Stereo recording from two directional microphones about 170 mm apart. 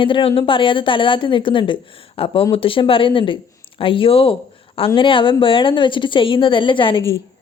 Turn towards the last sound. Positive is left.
turn(degrees=30)  # may be behind; listen again after turning